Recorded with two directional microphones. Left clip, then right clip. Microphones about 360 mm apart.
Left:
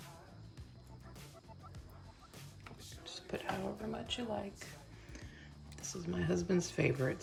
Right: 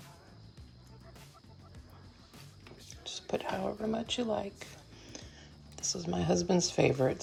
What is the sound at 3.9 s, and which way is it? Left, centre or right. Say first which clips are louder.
Speech: right 5 dB; centre.